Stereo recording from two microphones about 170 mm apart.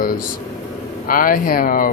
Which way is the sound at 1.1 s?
55° left (ahead or behind).